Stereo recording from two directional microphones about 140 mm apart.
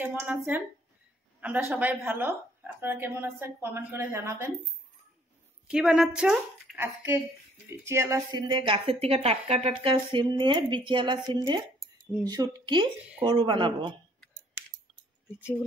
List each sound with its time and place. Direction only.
0.0 s a woman's voice: 10° right (ahead or behind)
5.7 s speech: 5° right (ahead or behind)
7.8 s speech: 20° right (ahead or behind)
8.3 s a woman's voice: 30° right (ahead or behind)